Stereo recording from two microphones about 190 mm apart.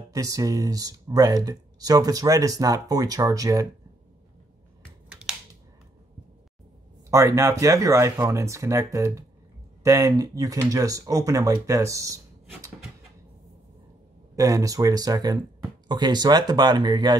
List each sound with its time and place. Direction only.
0.1 s speech: 20° right (ahead or behind)
5.3 s a sound: centre (ahead or behind)
7.1 s speech: 15° right (ahead or behind)
14.3 s speech: 15° right (ahead or behind)